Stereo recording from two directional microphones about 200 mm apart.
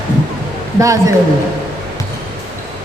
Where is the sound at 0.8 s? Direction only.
15° right (ahead or behind).